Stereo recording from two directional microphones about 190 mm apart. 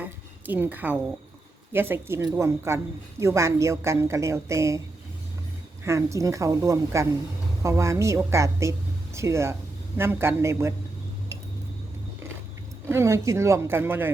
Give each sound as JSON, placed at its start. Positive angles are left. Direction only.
{"t": 0.0, "sound": "a sound", "side_deg": -10}
{"t": 1.7, "sound": "a woman's voice", "side_deg": -10}
{"t": 5.8, "sound": "a woman's voice", "side_deg": -15}
{"t": 12.9, "sound": "a woman's voice", "side_deg": -15}